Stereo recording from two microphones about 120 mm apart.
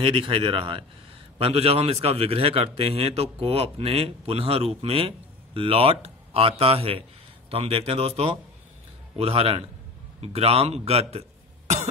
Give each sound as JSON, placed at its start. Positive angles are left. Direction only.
{"t": 0.0, "sound": "a man's voice", "side_deg": -50}